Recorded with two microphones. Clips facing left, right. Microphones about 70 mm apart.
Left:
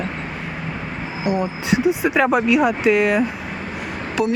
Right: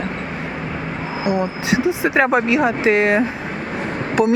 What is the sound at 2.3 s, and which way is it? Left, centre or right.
Speech, right.